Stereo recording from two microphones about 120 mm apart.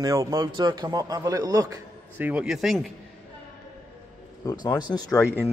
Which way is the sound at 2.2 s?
10° right (ahead or behind).